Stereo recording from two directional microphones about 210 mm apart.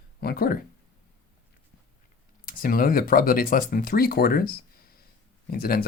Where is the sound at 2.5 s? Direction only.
45° left (ahead or behind).